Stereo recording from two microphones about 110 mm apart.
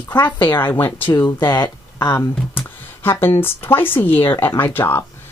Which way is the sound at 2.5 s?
20° left (ahead or behind).